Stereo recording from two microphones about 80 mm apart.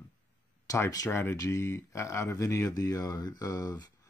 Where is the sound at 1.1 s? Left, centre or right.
Left.